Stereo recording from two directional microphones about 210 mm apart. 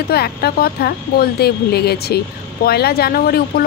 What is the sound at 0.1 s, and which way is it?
Speech, 50° left (ahead or behind).